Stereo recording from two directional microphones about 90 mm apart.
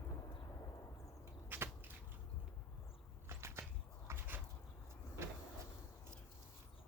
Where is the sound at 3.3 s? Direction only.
30° right (ahead or behind).